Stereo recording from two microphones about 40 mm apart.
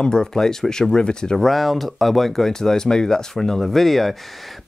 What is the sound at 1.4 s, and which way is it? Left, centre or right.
Speech, centre.